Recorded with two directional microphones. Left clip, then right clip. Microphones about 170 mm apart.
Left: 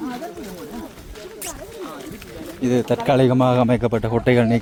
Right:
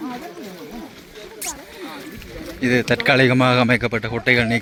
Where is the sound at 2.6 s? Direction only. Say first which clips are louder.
Right 2 dB; 10° left (ahead or behind).